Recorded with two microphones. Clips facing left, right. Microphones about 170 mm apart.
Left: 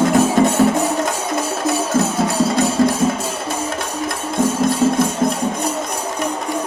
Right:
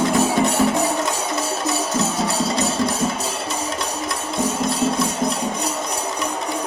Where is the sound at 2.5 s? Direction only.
50° left (ahead or behind).